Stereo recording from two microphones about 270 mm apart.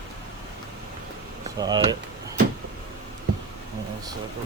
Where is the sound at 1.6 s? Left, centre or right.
Centre.